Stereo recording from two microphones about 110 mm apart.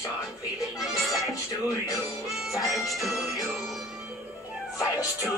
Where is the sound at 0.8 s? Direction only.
Centre (ahead or behind).